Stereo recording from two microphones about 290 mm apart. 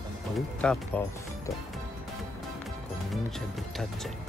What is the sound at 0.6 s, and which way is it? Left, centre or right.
Speech, centre.